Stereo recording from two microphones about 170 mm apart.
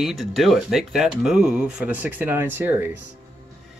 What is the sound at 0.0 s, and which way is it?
Speech, centre (ahead or behind).